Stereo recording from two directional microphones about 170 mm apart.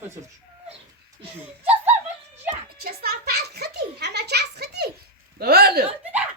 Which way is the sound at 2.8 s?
65° right (ahead or behind).